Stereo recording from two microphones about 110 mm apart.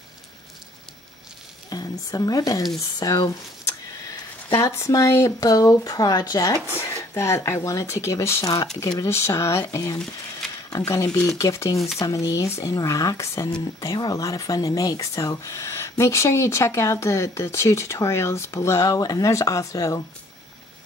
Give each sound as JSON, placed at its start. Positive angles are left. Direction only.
{"t": 1.7, "sound": "speech", "side_deg": 35}
{"t": 4.6, "sound": "speech", "side_deg": 25}